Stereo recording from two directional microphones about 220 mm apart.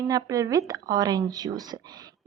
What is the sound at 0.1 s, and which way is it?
A woman's voice, 15° right (ahead or behind).